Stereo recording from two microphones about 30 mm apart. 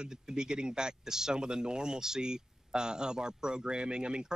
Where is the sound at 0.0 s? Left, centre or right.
Right.